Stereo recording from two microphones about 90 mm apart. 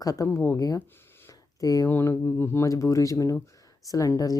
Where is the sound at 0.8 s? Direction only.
25° left (ahead or behind).